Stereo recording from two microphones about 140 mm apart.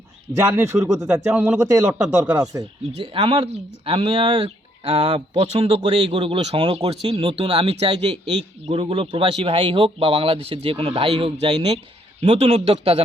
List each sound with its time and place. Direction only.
0.4 s speech: 20° right (ahead or behind)
1.0 s speech: 10° right (ahead or behind)
2.4 s speech: 25° right (ahead or behind)
3.0 s speech: 40° right (ahead or behind)